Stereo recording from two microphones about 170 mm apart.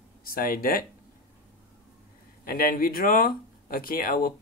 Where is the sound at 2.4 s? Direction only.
60° left (ahead or behind).